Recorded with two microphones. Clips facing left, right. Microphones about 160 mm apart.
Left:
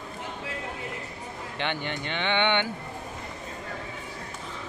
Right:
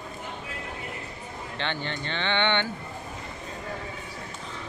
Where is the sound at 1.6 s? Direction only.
15° left (ahead or behind).